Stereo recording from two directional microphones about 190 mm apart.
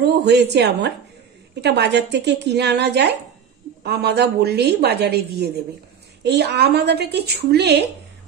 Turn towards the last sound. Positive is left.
turn(degrees=-60)  # may be behind; listen again after turning